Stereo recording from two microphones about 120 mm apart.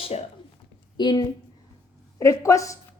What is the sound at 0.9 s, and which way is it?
Speech, 35° left (ahead or behind).